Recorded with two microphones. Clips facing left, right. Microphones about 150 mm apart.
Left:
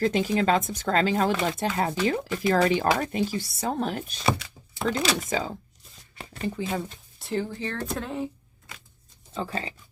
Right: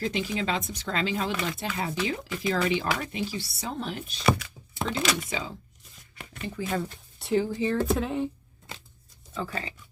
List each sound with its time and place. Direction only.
0.0 s speech: 45° left (ahead or behind)
4.2 s speech: 25° left (ahead or behind)
4.9 s speech: 40° left (ahead or behind)
6.7 s speech: 20° left (ahead or behind)
7.2 s speech: 5° right (ahead or behind)
8.7 s a sound: 30° right (ahead or behind)
9.3 s speech: 30° left (ahead or behind)